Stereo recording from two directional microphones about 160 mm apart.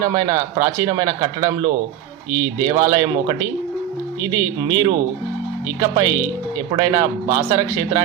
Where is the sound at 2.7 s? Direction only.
20° right (ahead or behind).